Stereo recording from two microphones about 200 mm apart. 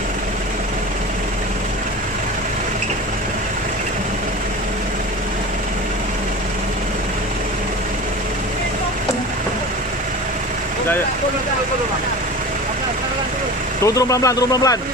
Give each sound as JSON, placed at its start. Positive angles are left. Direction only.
{"t": 13.8, "sound": "speech", "side_deg": 15}